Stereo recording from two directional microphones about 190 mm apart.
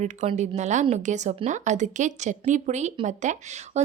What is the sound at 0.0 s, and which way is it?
A woman's voice, 35° right (ahead or behind).